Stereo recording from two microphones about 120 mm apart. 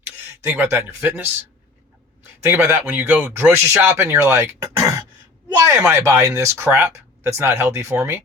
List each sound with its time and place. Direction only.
0.2 s speech: 15° right (ahead or behind)